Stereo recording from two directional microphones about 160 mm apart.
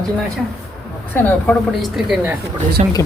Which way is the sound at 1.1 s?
10° left (ahead or behind).